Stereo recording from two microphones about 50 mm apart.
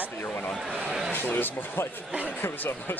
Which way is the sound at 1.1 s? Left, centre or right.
Left.